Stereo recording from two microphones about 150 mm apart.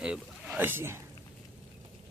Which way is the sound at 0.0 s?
5° right (ahead or behind).